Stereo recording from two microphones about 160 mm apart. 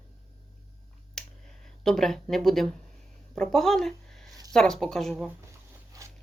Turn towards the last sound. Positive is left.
turn(degrees=-20)  # may be behind; listen again after turning